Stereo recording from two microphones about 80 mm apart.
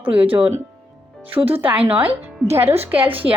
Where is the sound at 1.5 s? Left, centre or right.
Right.